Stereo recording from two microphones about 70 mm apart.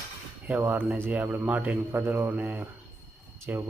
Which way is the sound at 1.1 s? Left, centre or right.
Right.